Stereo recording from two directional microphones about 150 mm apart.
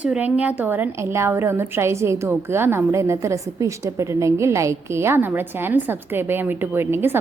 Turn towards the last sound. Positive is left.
turn(degrees=-15)  # may be behind; listen again after turning